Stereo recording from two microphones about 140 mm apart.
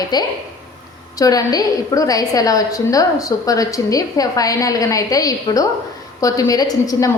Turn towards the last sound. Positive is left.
turn(degrees=25)  # may be behind; listen again after turning